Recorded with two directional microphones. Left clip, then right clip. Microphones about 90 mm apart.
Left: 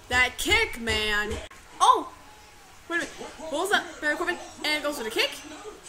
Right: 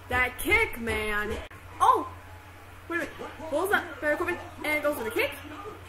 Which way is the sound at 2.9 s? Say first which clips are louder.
Left 2 dB; 20° left (ahead or behind).